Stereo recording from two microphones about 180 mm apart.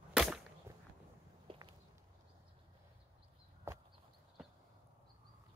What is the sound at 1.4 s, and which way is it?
Walk, 30° right (ahead or behind).